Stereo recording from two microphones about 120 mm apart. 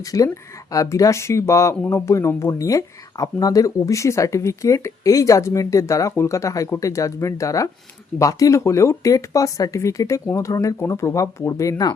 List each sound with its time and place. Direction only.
0.0 s speech: 30° left (ahead or behind)